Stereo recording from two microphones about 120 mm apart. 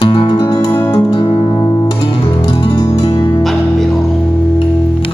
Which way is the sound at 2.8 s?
30° left (ahead or behind).